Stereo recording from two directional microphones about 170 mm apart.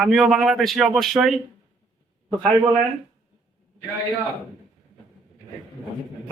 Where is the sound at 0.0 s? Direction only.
Centre (ahead or behind).